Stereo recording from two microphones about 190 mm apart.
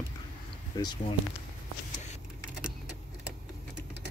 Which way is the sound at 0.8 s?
20° left (ahead or behind).